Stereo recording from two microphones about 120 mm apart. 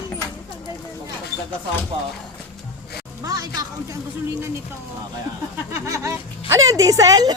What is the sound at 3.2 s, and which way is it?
Speech, 30° right (ahead or behind).